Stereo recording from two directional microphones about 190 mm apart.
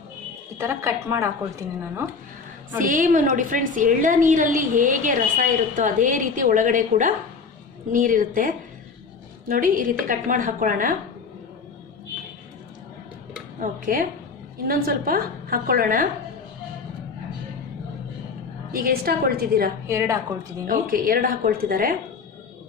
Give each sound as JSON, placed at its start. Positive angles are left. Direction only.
{"t": 0.6, "sound": "a woman's voice", "side_deg": -15}
{"t": 2.8, "sound": "a woman's voice", "side_deg": -45}
{"t": 13.6, "sound": "a woman's voice", "side_deg": -45}
{"t": 18.7, "sound": "a woman's voice", "side_deg": -50}
{"t": 19.9, "sound": "a woman's voice", "side_deg": -15}
{"t": 20.6, "sound": "a woman's voice", "side_deg": -50}